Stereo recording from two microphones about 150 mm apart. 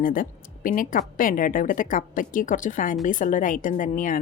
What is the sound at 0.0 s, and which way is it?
A woman's voice, 65° left (ahead or behind).